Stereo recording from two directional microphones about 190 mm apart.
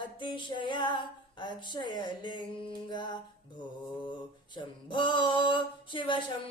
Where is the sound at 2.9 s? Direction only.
25° left (ahead or behind).